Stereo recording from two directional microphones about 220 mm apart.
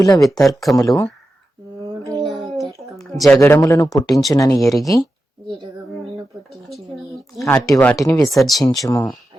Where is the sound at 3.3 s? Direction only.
15° left (ahead or behind).